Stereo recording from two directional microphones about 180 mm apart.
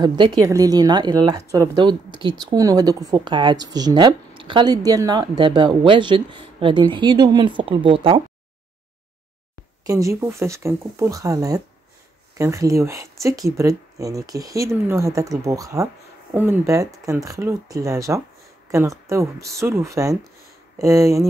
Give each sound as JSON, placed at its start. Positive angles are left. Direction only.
{"t": 0.0, "sound": "speech", "side_deg": -25}
{"t": 9.8, "sound": "speech", "side_deg": -15}